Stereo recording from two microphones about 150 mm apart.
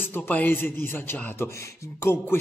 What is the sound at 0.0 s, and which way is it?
A man's voice, 15° left (ahead or behind).